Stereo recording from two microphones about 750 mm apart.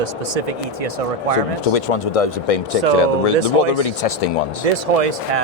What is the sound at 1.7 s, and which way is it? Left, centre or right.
Speech, left.